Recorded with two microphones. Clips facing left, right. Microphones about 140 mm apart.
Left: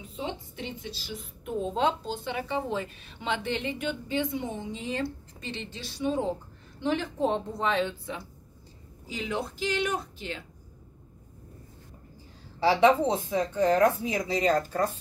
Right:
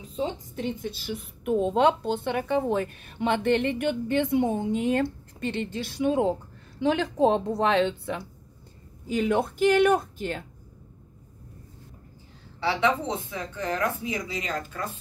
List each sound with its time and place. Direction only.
0.1 s a woman's voice: 40° right (ahead or behind); by 6.3 s 60° right (ahead or behind)
6.8 s a woman's voice: 75° right (ahead or behind)
9.0 s a woman's voice: 50° right (ahead or behind)
12.5 s a woman's voice: 35° left (ahead or behind)